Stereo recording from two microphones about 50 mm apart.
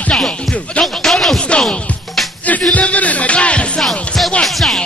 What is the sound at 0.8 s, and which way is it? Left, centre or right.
Music, centre.